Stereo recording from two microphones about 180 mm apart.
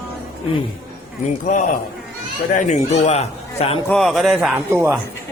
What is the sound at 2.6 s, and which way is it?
Speech, 40° left (ahead or behind).